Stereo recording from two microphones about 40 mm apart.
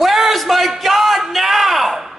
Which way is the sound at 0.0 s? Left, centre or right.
Centre.